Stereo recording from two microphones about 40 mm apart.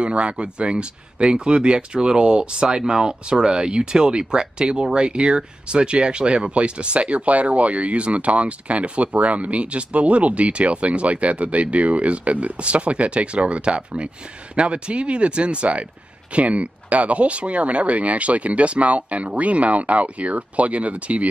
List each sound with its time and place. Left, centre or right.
0.0 s speech: right